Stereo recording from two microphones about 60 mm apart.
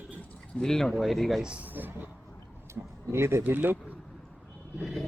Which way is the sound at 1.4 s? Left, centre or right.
Centre.